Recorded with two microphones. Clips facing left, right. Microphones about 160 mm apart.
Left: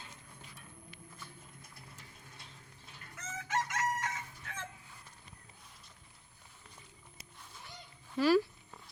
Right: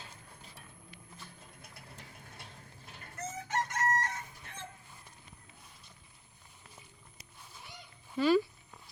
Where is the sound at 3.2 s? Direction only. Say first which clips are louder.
Right 1 dB; 90° left.